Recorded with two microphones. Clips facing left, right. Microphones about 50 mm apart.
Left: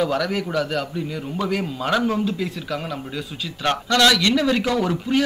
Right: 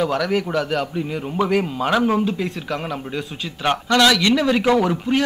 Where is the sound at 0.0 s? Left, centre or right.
Centre.